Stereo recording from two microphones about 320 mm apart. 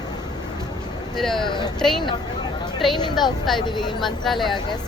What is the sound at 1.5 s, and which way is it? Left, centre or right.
Speech, centre.